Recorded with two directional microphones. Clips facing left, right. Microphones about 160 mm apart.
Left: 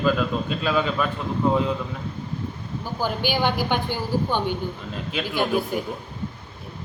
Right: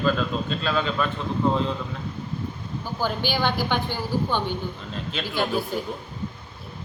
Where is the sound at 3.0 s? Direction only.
15° left (ahead or behind).